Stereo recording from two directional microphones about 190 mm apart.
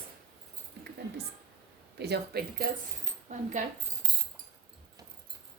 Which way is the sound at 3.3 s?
40° right (ahead or behind).